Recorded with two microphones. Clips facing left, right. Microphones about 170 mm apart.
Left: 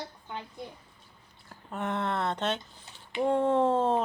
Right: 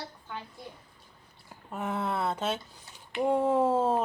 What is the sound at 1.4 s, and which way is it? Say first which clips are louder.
Speech: left 1 dB; 5° right (ahead or behind).